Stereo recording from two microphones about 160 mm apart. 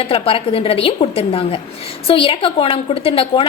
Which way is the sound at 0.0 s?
35° left (ahead or behind).